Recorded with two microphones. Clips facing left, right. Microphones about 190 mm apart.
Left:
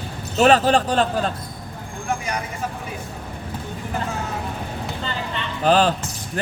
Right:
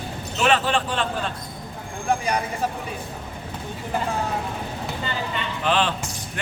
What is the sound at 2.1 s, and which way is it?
Vehicle, 30° right (ahead or behind).